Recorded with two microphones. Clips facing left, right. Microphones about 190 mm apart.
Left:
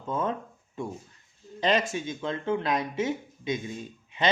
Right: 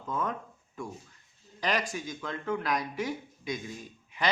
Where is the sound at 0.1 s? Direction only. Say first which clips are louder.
Left 4 dB; 25° left (ahead or behind).